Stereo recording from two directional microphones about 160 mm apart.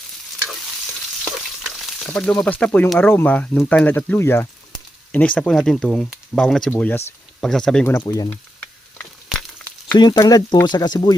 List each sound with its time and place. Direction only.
2.0 s speech: 5° left (ahead or behind)
7.9 s speech: 20° left (ahead or behind)
8.3 s frying: 10° left (ahead or behind)
10.0 s speech: 25° left (ahead or behind)